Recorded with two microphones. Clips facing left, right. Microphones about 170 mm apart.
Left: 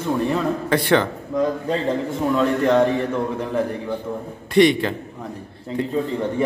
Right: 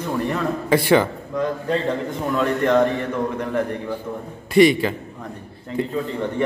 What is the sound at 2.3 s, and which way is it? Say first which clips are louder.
Speech: left 1 dB; centre (ahead or behind).